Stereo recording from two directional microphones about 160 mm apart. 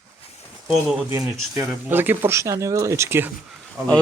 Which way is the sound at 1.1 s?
20° right (ahead or behind).